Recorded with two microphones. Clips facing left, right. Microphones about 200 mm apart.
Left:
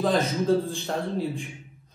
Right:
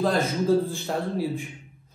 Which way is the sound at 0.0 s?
Centre (ahead or behind).